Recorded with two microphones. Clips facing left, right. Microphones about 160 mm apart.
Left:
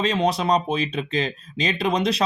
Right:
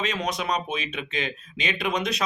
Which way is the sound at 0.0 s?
30° left (ahead or behind).